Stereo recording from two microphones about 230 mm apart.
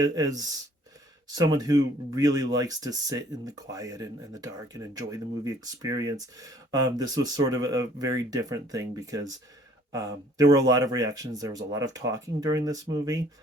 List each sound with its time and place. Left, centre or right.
0.0 s speech: centre